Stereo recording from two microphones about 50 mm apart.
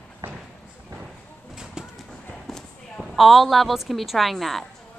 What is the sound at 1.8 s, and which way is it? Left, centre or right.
Clip-clop, centre.